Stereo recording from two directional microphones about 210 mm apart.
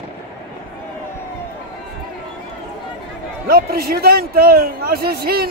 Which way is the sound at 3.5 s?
45° right (ahead or behind).